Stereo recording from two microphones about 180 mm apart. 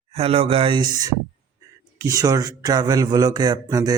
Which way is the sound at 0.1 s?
30° right (ahead or behind).